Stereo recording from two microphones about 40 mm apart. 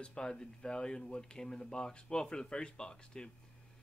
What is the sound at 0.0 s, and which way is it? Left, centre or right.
Speech, left.